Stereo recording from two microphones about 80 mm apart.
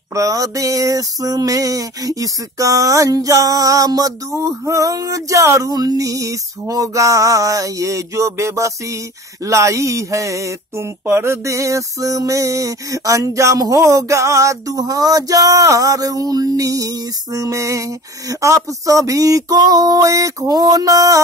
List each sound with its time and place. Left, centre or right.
0.1 s speech: right